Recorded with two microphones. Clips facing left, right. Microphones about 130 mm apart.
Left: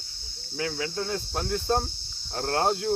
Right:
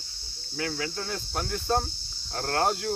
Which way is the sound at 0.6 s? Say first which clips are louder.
Left 2 dB; 25° left (ahead or behind).